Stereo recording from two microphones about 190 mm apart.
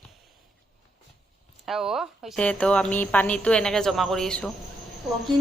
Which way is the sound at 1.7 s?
Centre (ahead or behind).